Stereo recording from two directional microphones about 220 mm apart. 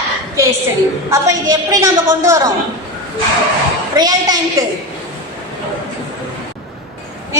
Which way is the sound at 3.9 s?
15° right (ahead or behind).